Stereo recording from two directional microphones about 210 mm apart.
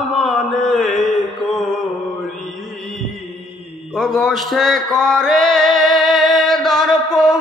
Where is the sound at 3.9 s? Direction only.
Centre (ahead or behind).